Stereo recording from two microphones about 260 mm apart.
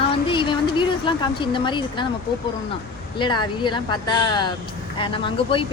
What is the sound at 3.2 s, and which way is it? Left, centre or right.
Speech, centre.